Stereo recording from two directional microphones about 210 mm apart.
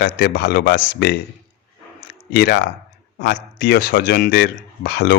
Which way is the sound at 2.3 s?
55° left (ahead or behind).